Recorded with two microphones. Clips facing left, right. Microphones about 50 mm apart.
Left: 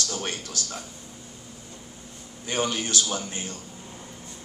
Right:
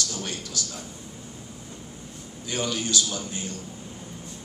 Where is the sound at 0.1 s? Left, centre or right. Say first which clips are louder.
Left 1 dB; left.